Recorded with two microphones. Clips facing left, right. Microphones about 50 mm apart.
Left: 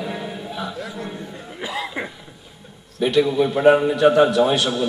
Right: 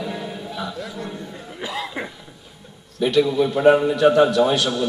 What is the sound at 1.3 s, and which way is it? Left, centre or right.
Cough, centre.